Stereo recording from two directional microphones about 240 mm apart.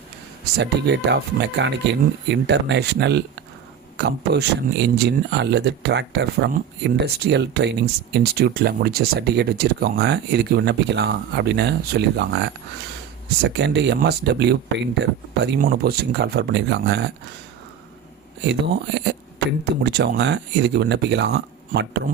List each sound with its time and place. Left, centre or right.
0.5 s speech: right
18.4 s speech: right